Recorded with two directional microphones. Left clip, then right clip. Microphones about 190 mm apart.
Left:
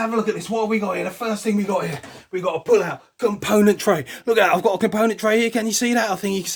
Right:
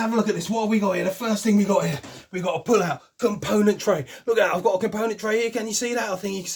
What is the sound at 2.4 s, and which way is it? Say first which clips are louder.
Speech: left 3 dB; 20° left (ahead or behind).